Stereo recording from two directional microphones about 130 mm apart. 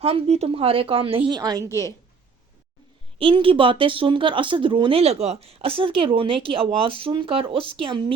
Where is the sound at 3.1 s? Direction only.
40° right (ahead or behind).